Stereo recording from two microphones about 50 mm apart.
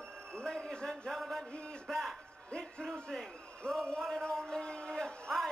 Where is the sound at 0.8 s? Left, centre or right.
Centre.